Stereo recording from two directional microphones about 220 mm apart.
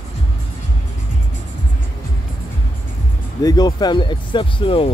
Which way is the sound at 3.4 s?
20° left (ahead or behind).